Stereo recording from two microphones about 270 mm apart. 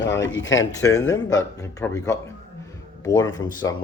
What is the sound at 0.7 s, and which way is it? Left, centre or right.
Speech, centre.